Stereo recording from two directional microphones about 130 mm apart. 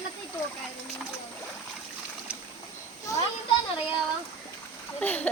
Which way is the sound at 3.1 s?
25° left (ahead or behind).